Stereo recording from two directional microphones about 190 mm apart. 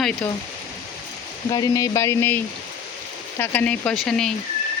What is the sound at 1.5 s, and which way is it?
Speech, 20° left (ahead or behind).